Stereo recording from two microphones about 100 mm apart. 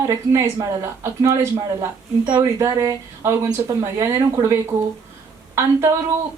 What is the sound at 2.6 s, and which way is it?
Speech, 30° right (ahead or behind).